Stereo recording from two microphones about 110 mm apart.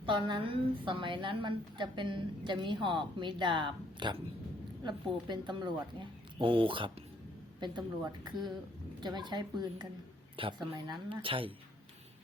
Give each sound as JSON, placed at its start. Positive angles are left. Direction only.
{"t": 0.0, "sound": "a woman's voice", "side_deg": -45}
{"t": 10.8, "sound": "a woman's voice", "side_deg": -40}